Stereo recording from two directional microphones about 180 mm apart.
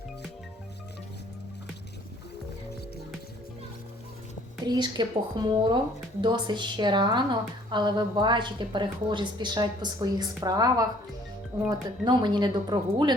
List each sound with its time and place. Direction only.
4.6 s a woman's voice: 25° right (ahead or behind)